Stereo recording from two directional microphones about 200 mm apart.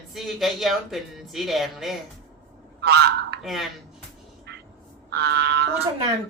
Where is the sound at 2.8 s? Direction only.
55° right (ahead or behind).